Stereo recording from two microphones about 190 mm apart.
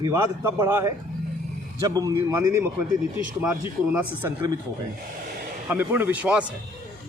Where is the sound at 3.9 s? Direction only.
10° right (ahead or behind).